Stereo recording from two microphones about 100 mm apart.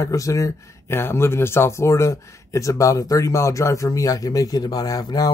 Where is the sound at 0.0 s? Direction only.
35° left (ahead or behind).